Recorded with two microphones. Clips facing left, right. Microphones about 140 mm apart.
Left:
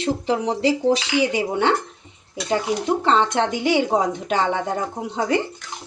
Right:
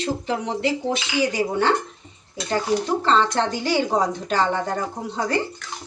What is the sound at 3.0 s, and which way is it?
Speech, 20° left (ahead or behind).